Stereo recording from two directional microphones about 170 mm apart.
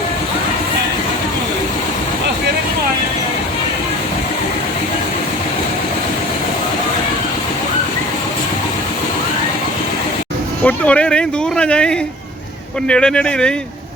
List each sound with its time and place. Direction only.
10.6 s speech: 10° left (ahead or behind)